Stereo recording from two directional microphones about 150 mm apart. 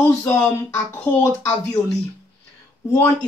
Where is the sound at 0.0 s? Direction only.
10° left (ahead or behind).